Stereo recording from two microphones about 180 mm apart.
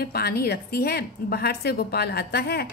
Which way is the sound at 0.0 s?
60° left (ahead or behind).